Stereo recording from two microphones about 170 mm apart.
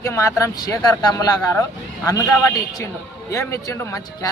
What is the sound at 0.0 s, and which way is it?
Speech, 20° left (ahead or behind).